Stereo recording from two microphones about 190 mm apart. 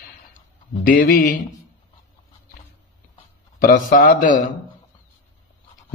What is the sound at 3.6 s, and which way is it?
Speech, 50° left (ahead or behind).